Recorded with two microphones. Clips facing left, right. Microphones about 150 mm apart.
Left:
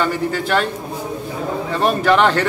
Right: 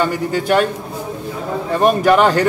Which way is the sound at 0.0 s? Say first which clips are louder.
Right 2 dB; 15° right (ahead or behind).